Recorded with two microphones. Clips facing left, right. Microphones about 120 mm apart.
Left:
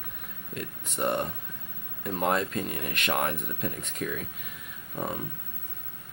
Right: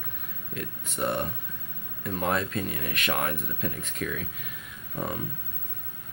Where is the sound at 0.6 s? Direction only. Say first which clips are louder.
Even; 15° left (ahead or behind).